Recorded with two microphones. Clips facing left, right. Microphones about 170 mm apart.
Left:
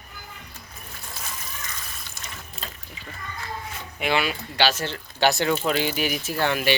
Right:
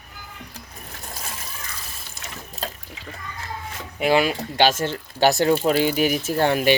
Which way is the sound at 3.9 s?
40° right (ahead or behind).